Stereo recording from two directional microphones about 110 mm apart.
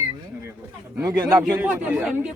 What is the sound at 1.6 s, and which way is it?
Speech, 10° right (ahead or behind).